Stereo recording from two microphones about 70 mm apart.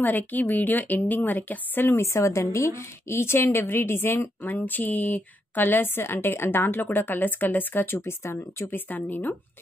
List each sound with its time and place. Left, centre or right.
0.0 s a woman's voice: left